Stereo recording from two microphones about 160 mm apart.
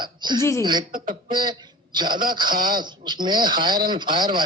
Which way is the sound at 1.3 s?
30° right (ahead or behind).